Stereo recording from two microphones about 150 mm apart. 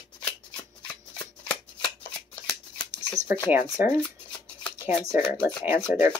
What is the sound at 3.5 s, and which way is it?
Speech, 45° left (ahead or behind).